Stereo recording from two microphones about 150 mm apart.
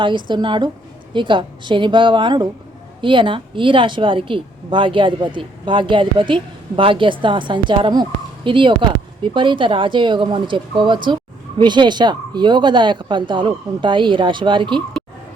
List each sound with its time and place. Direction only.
0.3 s speech: 30° right (ahead or behind)